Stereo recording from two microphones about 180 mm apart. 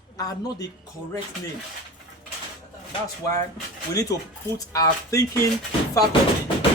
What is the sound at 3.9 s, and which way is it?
Speech, 20° left (ahead or behind).